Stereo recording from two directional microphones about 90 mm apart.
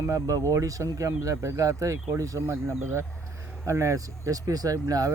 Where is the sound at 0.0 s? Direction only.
40° right (ahead or behind).